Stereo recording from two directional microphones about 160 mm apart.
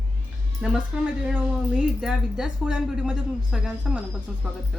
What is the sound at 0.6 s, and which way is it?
Speech, 5° right (ahead or behind).